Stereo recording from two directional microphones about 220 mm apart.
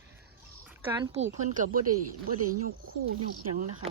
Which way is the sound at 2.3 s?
90° right.